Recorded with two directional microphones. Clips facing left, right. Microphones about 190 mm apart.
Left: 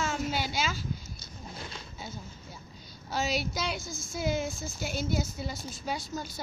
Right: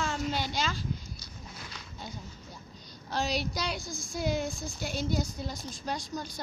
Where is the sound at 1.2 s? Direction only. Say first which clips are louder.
Left 3 dB; 25° left (ahead or behind).